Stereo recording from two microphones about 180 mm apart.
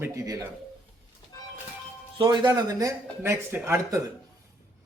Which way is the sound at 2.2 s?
25° right (ahead or behind).